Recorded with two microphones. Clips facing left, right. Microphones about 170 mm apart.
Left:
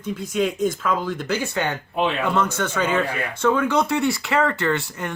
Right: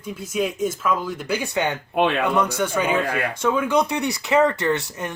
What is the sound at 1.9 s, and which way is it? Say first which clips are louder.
Speech: right 3 dB; 65° right (ahead or behind).